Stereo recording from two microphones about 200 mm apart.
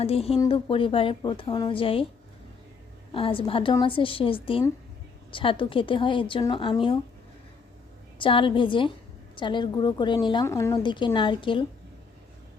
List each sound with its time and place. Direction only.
0.0 s a woman's voice: 30° left (ahead or behind)
3.1 s a woman's voice: 25° left (ahead or behind)
8.2 s a woman's voice: 25° left (ahead or behind)